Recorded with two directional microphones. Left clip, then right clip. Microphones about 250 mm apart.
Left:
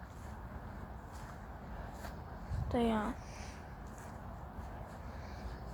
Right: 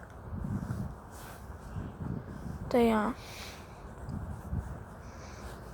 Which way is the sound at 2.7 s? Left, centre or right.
Right.